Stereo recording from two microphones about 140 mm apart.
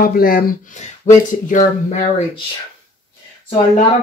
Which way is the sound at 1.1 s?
60° left (ahead or behind).